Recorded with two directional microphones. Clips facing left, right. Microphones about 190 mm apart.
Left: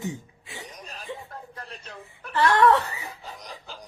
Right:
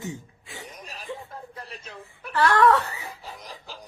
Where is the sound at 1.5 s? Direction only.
5° right (ahead or behind).